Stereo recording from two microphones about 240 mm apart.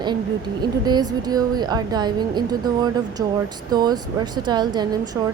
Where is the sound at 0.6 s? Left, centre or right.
Centre.